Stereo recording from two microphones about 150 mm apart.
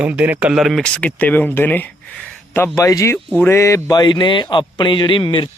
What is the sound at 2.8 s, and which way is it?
A man's voice, 20° left (ahead or behind).